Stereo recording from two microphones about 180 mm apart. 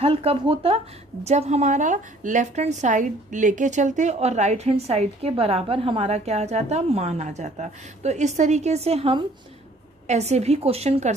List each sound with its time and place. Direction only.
0.0 s a woman's voice: 35° right (ahead or behind)